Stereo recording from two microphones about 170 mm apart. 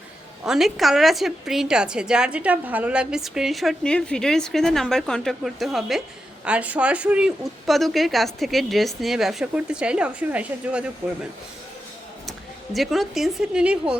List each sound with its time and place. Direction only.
0.4 s a woman's voice: centre (ahead or behind)
12.7 s a woman's voice: centre (ahead or behind)